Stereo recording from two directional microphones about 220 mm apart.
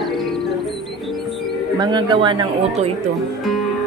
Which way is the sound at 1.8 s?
20° right (ahead or behind).